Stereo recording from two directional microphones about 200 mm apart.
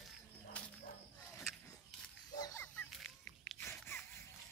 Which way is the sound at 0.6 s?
5° left (ahead or behind).